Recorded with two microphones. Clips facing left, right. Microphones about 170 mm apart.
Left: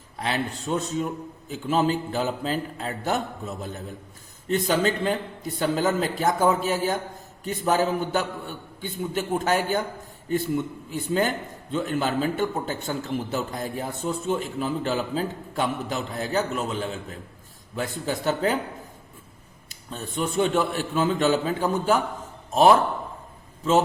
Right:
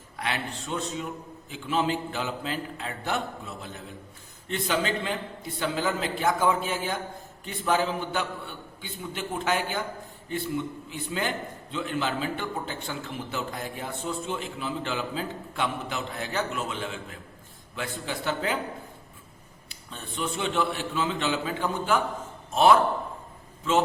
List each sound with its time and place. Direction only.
0.2 s a man's voice: 35° left (ahead or behind)
10.9 s a man's voice: 45° left (ahead or behind)
19.6 s a man's voice: 45° left (ahead or behind)